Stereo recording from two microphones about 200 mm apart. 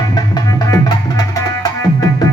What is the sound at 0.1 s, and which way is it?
Music, 20° left (ahead or behind).